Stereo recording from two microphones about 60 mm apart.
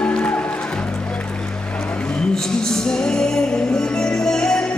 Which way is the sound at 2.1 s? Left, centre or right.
Centre.